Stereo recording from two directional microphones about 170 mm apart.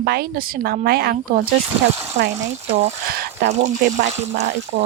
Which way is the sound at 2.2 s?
45° right (ahead or behind).